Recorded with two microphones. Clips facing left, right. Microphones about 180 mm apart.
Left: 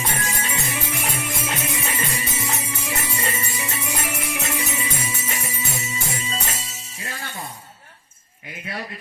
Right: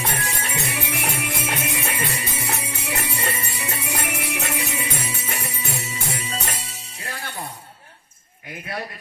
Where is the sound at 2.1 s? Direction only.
65° right (ahead or behind).